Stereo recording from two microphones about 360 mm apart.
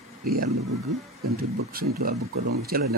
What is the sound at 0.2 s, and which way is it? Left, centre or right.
Speech, right.